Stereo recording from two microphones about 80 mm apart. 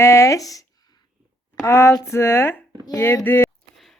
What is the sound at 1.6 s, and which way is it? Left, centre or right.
Speech, left.